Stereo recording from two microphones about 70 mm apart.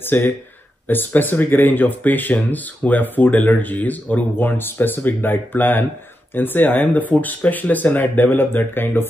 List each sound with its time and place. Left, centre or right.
0.0 s speech: left